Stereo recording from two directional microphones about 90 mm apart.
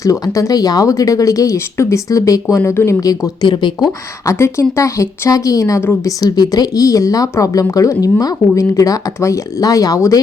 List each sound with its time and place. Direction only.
0.0 s speech: 40° left (ahead or behind)
3.4 s speech: 60° left (ahead or behind)
4.3 s speech: 30° left (ahead or behind)
6.1 s speech: 45° left (ahead or behind)